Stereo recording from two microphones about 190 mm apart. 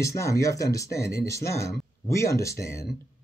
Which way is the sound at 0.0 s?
15° left (ahead or behind).